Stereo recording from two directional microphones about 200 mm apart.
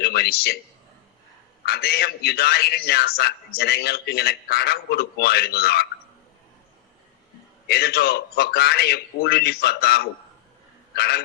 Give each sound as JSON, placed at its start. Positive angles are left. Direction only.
{"t": 0.0, "sound": "a man's voice", "side_deg": 55}
{"t": 1.6, "sound": "a man's voice", "side_deg": 50}
{"t": 7.7, "sound": "a man's voice", "side_deg": 50}
{"t": 10.9, "sound": "a sound", "side_deg": 55}